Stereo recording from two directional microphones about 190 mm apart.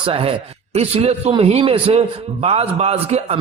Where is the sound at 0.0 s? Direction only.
30° right (ahead or behind).